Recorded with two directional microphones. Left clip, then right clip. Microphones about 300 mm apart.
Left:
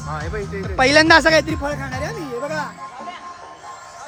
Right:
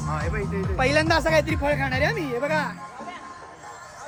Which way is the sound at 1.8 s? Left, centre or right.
Centre.